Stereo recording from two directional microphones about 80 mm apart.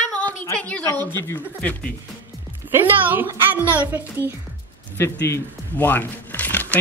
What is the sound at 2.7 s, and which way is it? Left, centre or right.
Speech, right.